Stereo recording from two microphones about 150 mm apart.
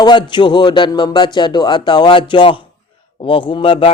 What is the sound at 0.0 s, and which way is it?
A man's voice, 30° left (ahead or behind).